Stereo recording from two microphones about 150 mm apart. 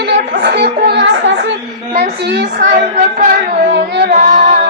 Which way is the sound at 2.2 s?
75° right (ahead or behind).